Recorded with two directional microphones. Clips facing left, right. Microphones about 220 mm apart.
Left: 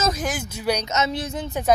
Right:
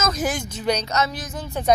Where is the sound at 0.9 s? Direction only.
25° left (ahead or behind).